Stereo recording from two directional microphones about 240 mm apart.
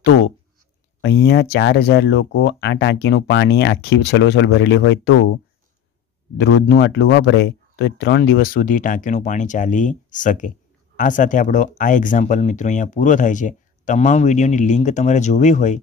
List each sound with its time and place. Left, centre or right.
1.0 s speech: left
6.3 s speech: left